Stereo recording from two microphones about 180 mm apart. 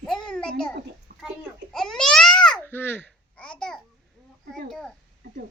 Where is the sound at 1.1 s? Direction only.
50° right (ahead or behind).